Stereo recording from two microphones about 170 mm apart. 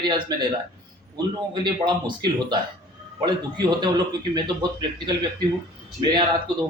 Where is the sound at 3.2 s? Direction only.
25° right (ahead or behind).